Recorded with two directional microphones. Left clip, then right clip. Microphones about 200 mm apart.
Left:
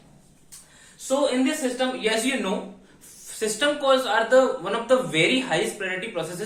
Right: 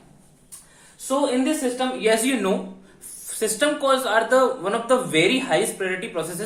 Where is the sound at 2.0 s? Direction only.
25° right (ahead or behind).